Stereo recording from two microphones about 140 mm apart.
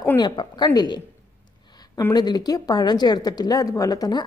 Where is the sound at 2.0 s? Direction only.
25° left (ahead or behind).